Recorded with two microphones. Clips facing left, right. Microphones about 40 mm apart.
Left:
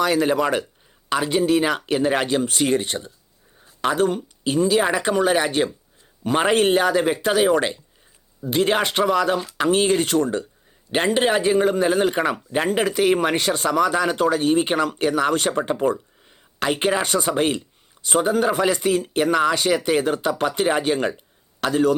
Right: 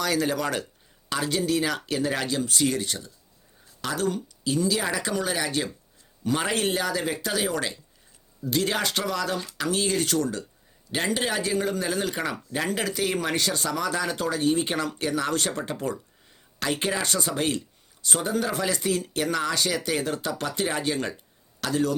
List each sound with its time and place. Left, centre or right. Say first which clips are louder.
0.0 s speech: left 6 dB; left